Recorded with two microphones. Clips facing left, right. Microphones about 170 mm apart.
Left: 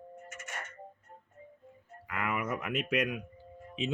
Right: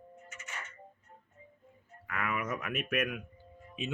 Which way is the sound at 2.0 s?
15° left (ahead or behind).